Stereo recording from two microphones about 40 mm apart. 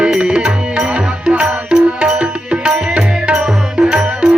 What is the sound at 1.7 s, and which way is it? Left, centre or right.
Music, right.